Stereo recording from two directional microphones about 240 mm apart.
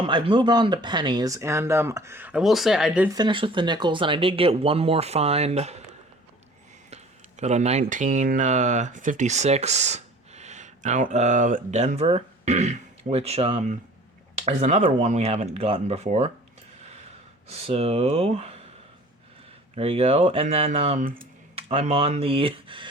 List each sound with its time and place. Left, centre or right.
0.0 s speech: right; by 3.1 s centre
3.2 s speech: centre
6.9 s speech: right
16.8 s gasp: right
17.5 s speech: right
19.7 s speech: right